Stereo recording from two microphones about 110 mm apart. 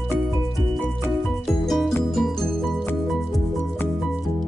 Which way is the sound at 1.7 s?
5° left (ahead or behind).